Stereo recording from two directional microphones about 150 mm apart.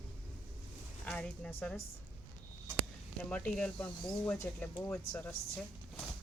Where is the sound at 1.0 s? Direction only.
5° left (ahead or behind).